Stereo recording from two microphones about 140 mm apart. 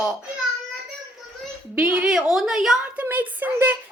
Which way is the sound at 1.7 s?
5° right (ahead or behind).